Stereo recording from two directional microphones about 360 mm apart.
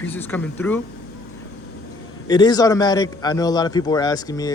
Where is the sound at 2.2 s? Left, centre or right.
Centre.